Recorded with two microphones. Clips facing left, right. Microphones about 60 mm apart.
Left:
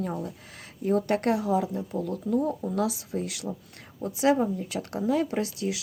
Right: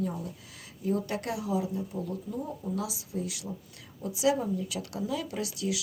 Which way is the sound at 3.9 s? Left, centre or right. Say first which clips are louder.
Left 4 dB; left.